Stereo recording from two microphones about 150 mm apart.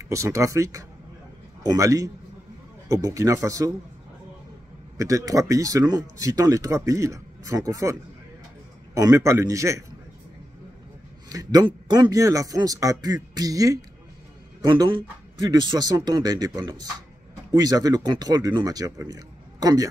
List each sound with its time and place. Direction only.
0.0 s speech: 20° right (ahead or behind)
4.9 s speech: 20° right (ahead or behind)
11.2 s speech: 25° right (ahead or behind)